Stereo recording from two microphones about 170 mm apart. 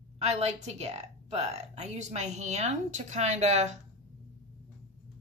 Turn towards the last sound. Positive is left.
turn(degrees=-40)  # may be behind; listen again after turning